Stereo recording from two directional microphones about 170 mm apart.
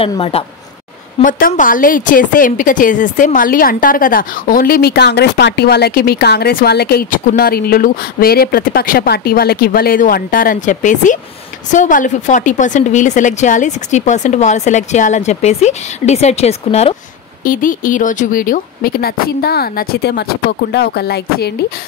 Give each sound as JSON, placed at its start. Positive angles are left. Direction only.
{"t": 0.0, "sound": "a woman's voice", "side_deg": 35}
{"t": 1.2, "sound": "a woman's voice", "side_deg": 50}
{"t": 17.4, "sound": "speech", "side_deg": 55}